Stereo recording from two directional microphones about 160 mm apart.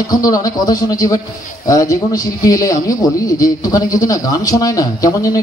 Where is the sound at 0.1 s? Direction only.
25° left (ahead or behind).